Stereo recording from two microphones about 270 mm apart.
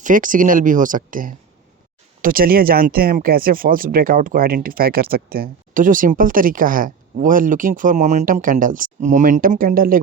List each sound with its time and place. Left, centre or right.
0.0 s speech: right